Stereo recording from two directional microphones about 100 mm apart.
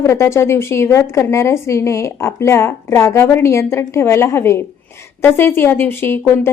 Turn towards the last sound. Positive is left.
turn(degrees=25)  # may be behind; listen again after turning